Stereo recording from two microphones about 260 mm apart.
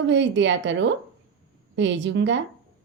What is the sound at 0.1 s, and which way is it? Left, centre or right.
Speech, right.